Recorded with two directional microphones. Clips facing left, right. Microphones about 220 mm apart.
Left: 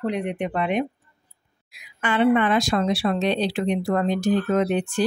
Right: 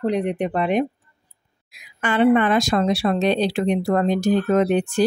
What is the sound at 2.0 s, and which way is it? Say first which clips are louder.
Speech: right 3 dB; 45° right (ahead or behind).